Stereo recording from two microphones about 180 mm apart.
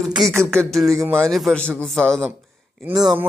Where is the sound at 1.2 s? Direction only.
Centre (ahead or behind).